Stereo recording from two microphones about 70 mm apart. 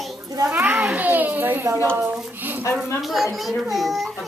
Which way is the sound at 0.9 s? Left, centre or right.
Right.